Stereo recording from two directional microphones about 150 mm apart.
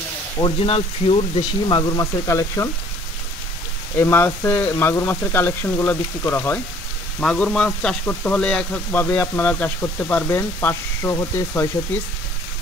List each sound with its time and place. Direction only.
0.4 s speech: 40° left (ahead or behind); by 2.7 s 20° left (ahead or behind)
4.0 s speech: 15° left (ahead or behind)